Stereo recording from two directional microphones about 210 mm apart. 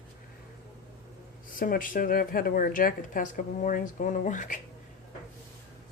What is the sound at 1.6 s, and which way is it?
Speech, 40° left (ahead or behind).